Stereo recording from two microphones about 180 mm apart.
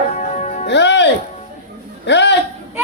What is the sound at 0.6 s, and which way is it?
Music, 75° left (ahead or behind).